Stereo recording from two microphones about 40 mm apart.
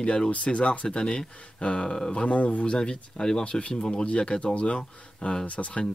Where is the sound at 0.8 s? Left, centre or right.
Centre.